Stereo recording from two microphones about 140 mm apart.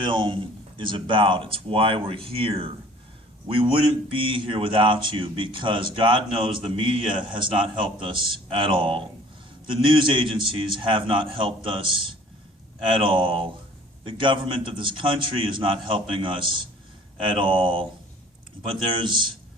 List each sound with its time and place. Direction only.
0.0 s speech: 35° right (ahead or behind)